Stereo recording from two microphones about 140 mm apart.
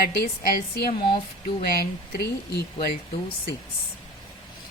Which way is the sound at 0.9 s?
35° left (ahead or behind).